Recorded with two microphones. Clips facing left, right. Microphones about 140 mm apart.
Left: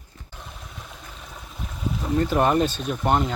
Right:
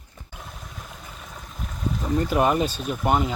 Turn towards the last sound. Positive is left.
turn(degrees=-5)  # may be behind; listen again after turning